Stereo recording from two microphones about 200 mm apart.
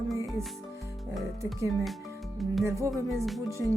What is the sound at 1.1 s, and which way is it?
Speech, centre (ahead or behind).